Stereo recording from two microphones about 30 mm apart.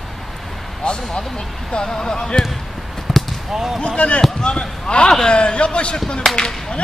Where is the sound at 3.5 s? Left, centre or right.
Centre.